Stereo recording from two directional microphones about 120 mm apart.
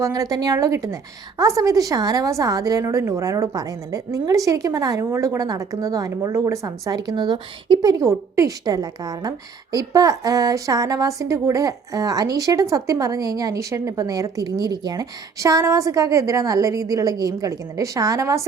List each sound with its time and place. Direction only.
0.0 s a woman's voice: 30° right (ahead or behind)